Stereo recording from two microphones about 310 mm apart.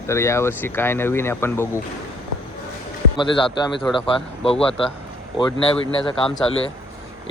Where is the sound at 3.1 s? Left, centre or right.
Centre.